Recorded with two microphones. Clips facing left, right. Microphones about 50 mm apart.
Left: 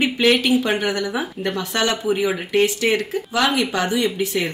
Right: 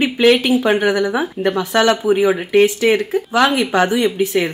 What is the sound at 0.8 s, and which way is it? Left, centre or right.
Speech, centre.